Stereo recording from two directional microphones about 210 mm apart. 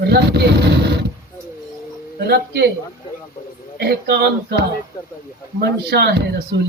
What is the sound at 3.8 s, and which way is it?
Speech, 50° right (ahead or behind).